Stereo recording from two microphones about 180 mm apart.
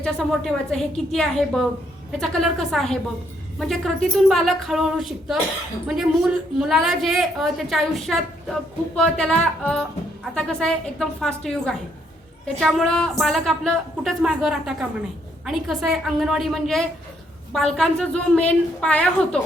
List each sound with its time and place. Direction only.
0.0 s a woman's voice: 5° left (ahead or behind)